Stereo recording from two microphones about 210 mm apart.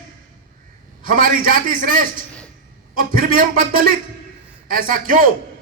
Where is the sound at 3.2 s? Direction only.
40° right (ahead or behind).